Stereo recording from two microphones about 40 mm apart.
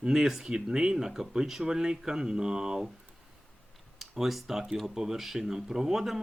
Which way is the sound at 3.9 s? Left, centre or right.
Centre.